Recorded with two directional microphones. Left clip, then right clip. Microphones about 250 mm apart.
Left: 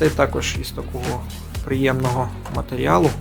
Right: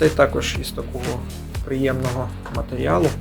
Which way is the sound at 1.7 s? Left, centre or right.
Centre.